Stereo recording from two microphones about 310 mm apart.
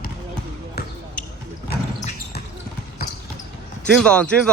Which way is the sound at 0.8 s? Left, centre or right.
Left.